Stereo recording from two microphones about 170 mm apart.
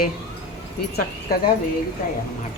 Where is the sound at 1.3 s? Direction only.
60° left (ahead or behind).